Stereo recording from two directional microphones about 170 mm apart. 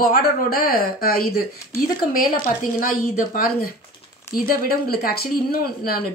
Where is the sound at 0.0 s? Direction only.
60° left (ahead or behind).